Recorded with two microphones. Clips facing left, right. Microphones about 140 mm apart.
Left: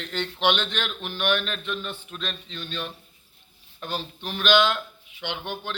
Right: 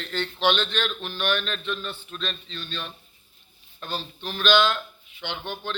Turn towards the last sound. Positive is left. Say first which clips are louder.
# even
turn(degrees=10)  # may be behind; listen again after turning